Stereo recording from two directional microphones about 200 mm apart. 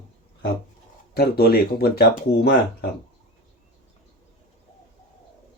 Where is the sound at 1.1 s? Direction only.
50° left (ahead or behind).